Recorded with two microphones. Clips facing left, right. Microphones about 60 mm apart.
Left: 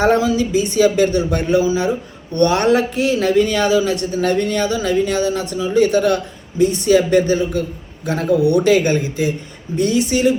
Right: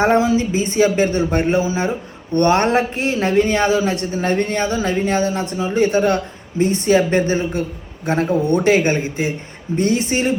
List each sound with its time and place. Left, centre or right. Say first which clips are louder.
0.0 s speech: even; right